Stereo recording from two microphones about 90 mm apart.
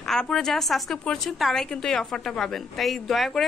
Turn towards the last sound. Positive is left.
turn(degrees=0)  # may be behind; listen again after turning